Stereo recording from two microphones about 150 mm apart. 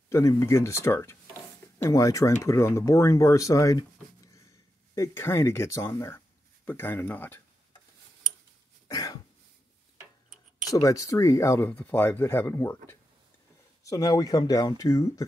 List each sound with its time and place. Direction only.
0.1 s speech: 20° left (ahead or behind)
4.9 s speech: 20° left (ahead or behind)
8.8 s cough: 25° left (ahead or behind)
10.7 s speech: 20° left (ahead or behind)